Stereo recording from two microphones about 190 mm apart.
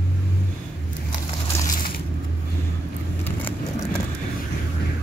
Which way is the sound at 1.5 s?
10° left (ahead or behind).